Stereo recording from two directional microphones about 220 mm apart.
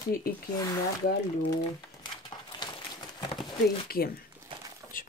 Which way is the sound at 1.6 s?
20° left (ahead or behind).